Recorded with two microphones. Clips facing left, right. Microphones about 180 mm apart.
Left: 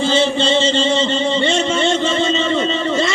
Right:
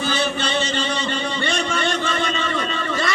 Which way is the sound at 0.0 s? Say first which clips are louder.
Left 7 dB; 25° left (ahead or behind).